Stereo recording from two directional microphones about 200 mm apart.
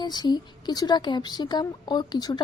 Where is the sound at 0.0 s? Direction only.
20° left (ahead or behind).